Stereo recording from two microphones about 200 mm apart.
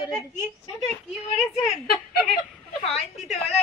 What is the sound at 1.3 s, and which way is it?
Speech, 35° left (ahead or behind).